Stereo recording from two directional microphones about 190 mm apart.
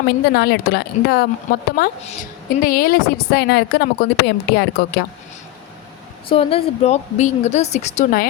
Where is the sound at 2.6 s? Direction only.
50° left (ahead or behind).